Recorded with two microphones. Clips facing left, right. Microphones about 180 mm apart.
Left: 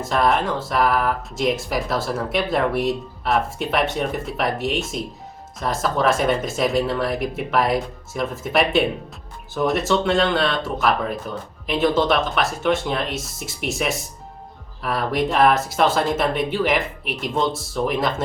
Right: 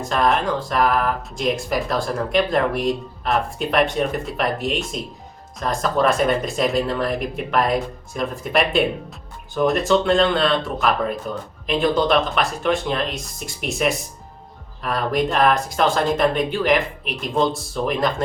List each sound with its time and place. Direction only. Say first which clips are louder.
0.0 s speech: even; centre (ahead or behind)